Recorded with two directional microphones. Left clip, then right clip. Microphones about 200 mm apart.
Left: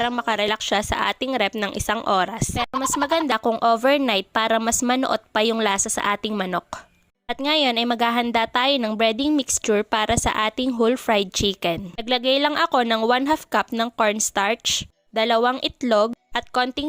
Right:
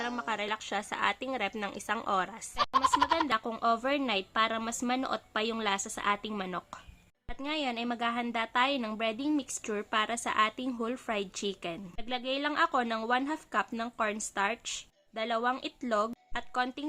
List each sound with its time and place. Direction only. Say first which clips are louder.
0.2 s a woman's voice: left 12 dB; 45° left (ahead or behind)
2.6 s speech: left 3 dB; centre (ahead or behind)
3.2 s a woman's voice: left 10 dB; 40° left (ahead or behind)